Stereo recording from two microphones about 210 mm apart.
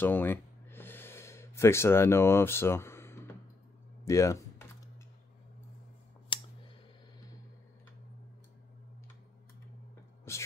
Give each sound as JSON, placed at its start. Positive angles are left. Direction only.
{"t": 0.0, "sound": "gasp", "side_deg": 10}
{"t": 4.0, "sound": "a sound", "side_deg": 15}
{"t": 6.3, "sound": "clicking", "side_deg": 25}
{"t": 10.3, "sound": "music", "side_deg": 15}